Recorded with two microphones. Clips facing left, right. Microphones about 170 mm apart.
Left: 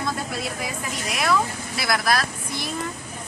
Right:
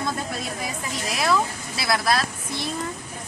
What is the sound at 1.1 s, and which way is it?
Speech, 30° right (ahead or behind).